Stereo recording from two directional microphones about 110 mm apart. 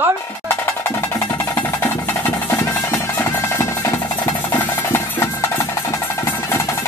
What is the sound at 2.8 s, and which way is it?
Music, 25° left (ahead or behind).